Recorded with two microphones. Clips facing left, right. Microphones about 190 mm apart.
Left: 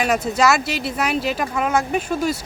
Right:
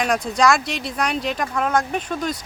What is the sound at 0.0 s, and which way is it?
Speech, 5° left (ahead or behind).